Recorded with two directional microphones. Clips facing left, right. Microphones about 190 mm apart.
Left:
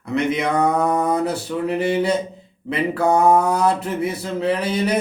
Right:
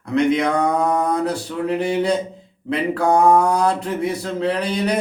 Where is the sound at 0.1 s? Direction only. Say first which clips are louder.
Right 3 dB; 5° left (ahead or behind).